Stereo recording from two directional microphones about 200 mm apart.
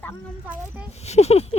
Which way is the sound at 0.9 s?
35° left (ahead or behind).